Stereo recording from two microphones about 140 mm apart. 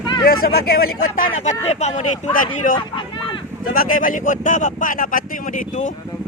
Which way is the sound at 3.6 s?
90° left.